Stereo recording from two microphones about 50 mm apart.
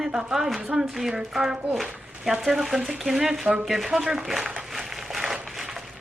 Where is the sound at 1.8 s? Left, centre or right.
Centre.